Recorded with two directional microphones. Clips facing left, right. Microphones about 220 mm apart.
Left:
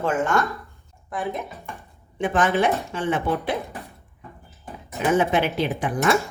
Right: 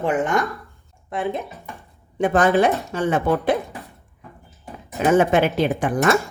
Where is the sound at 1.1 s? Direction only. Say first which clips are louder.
Right 3 dB; 30° right (ahead or behind).